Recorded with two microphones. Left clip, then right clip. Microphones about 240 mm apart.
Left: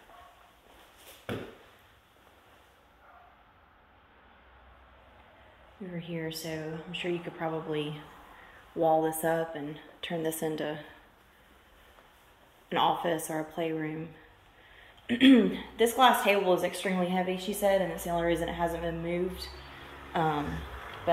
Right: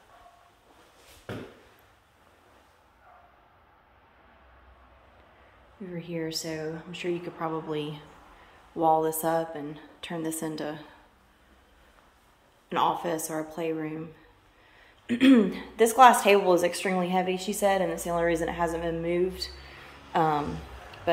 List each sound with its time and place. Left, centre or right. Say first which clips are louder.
5.9 s a woman's voice: right 4 dB; centre
8.8 s a woman's voice: right 2 dB; right
9.3 s a woman's voice: right 2 dB; centre
10.0 s a woman's voice: left 1 dB; right
12.6 s a woman's voice: right 1 dB; centre
15.0 s a woman's voice: right 1 dB; centre